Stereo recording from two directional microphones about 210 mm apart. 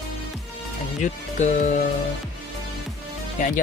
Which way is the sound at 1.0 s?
35° left (ahead or behind).